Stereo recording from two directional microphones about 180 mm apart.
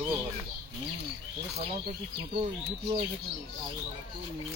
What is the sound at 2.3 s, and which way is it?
Speech, 30° right (ahead or behind).